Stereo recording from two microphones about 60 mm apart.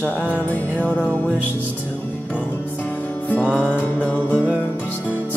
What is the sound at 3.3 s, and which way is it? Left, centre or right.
Music, left.